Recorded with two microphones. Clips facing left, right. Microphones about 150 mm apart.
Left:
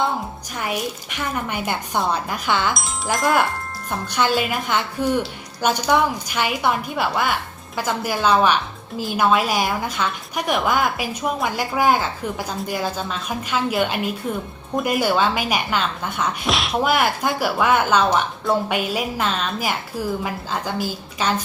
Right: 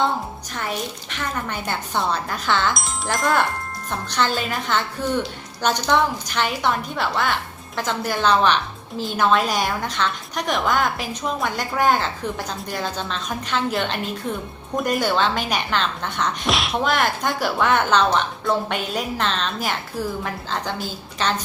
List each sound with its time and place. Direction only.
0.5 s a woman's voice: 10° left (ahead or behind)